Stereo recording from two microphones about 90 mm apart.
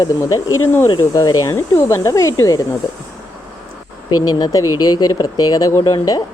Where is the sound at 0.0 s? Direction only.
40° left (ahead or behind).